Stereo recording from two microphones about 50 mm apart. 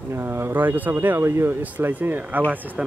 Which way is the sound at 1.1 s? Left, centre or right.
Right.